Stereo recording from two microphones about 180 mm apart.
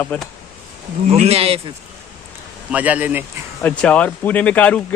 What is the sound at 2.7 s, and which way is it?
Speech, 10° right (ahead or behind).